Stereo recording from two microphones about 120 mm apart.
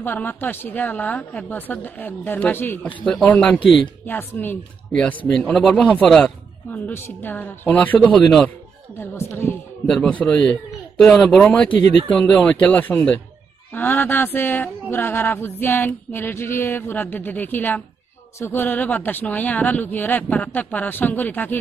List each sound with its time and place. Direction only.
0.0 s speech: 15° left (ahead or behind)
3.5 s speech: 45° left (ahead or behind)
4.0 s a man's voice: 15° left (ahead or behind)
6.7 s speech: 15° left (ahead or behind)
9.0 s a woman's voice: 20° left (ahead or behind)
9.8 s a man's voice: 5° left (ahead or behind)
11.4 s speech: 15° left (ahead or behind)